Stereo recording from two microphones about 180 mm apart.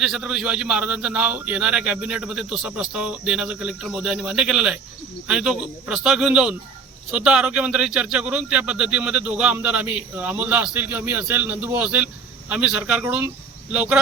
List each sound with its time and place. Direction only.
0.0 s a man's voice: 5° right (ahead or behind)